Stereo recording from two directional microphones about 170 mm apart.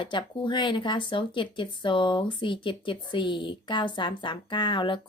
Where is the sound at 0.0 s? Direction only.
30° left (ahead or behind).